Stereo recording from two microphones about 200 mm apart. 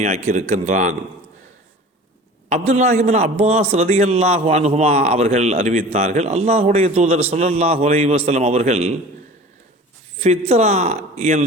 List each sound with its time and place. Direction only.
0.0 s a man's voice: 35° right (ahead or behind)
2.5 s a man's voice: 35° right (ahead or behind)
10.2 s a man's voice: 30° right (ahead or behind)